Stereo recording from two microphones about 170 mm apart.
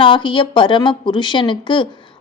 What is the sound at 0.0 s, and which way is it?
A woman's voice, 30° left (ahead or behind).